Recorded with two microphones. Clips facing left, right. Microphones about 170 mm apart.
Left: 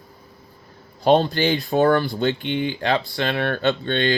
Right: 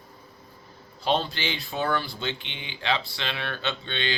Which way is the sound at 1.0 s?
50° left (ahead or behind).